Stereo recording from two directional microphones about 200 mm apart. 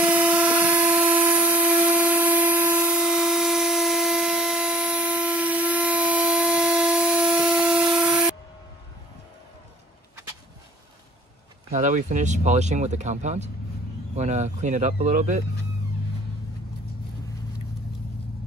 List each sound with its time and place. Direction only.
0.0 s vehicle: 5° right (ahead or behind)
11.7 s speech: 40° right (ahead or behind)